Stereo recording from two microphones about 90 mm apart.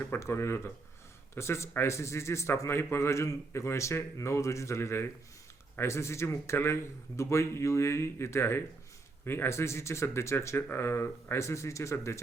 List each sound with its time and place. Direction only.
0.1 s a man's voice: 30° left (ahead or behind)